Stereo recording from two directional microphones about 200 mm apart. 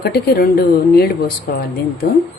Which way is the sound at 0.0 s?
50° left (ahead or behind).